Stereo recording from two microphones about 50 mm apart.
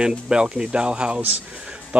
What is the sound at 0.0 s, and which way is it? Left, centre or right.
Speech, centre.